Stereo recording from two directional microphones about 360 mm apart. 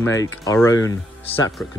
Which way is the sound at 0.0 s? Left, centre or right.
Centre.